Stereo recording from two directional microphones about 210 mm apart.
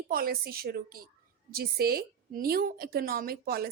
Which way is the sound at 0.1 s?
45° right (ahead or behind).